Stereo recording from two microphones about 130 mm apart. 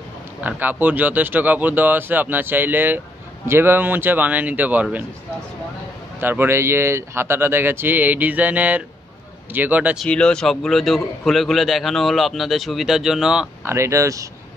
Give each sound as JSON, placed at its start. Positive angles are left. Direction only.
{"t": 0.4, "sound": "speech", "side_deg": -15}
{"t": 6.2, "sound": "speech", "side_deg": -15}
{"t": 9.9, "sound": "a man's voice", "side_deg": 5}
{"t": 13.7, "sound": "speech", "side_deg": -20}